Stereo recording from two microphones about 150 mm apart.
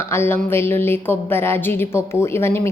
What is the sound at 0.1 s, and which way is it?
A woman's voice, 15° left (ahead or behind).